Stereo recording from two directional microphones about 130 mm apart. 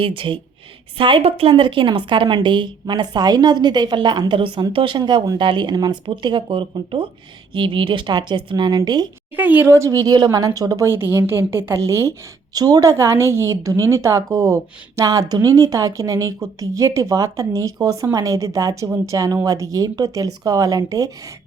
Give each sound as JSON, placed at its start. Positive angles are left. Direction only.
{"t": 0.0, "sound": "a woman's voice", "side_deg": -40}
{"t": 9.3, "sound": "a woman's voice", "side_deg": -15}